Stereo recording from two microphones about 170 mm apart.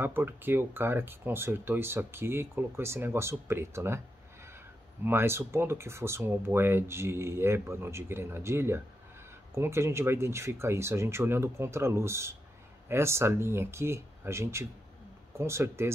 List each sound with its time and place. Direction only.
0.0 s speech: 10° right (ahead or behind)
5.0 s speech: 15° right (ahead or behind)